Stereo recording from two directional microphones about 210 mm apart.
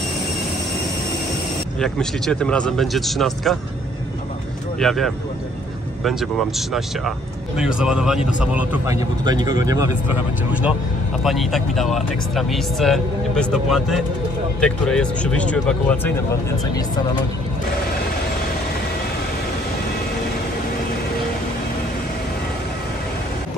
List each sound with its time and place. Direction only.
1.8 s speech: 5° left (ahead or behind)
4.7 s speech: centre (ahead or behind); by 9.8 s 20° right (ahead or behind)
10.0 s speech: 5° right (ahead or behind)